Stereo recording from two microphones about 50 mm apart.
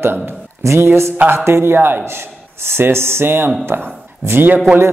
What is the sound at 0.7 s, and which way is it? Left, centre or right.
A man's voice, right.